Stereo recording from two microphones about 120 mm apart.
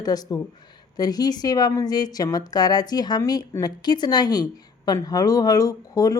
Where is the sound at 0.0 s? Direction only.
35° left (ahead or behind).